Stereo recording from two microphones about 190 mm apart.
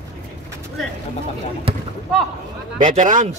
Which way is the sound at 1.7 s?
30° right (ahead or behind).